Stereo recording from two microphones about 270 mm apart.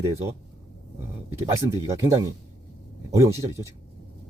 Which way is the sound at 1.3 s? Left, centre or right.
Centre.